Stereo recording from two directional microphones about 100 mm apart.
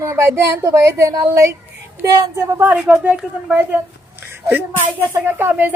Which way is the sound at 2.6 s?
15° right (ahead or behind).